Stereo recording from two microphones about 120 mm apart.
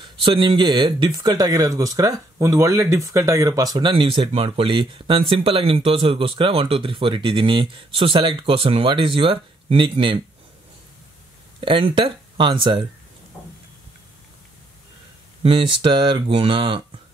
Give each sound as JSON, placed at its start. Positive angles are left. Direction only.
{"t": 0.0, "sound": "speech", "side_deg": -45}
{"t": 3.9, "sound": "speech", "side_deg": -45}
{"t": 11.6, "sound": "speech", "side_deg": -45}
{"t": 15.4, "sound": "speech", "side_deg": -45}